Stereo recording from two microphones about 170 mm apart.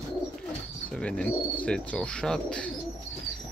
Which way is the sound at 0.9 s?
5° left (ahead or behind).